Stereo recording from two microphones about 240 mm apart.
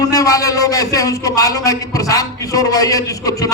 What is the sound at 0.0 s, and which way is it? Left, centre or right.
A man's voice, centre.